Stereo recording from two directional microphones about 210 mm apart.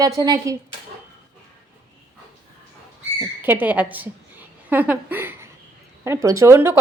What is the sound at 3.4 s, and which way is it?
A woman's voice, 10° right (ahead or behind).